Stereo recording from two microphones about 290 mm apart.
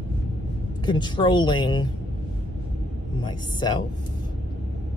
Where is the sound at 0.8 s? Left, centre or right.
Centre.